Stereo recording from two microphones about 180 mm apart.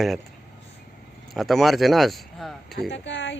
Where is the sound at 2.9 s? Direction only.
80° left.